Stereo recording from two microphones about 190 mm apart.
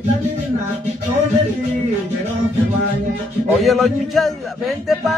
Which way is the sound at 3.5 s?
Centre (ahead or behind).